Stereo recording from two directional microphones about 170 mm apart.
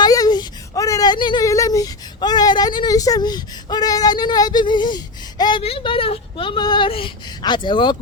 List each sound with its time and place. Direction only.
0.0 s speech: 20° left (ahead or behind)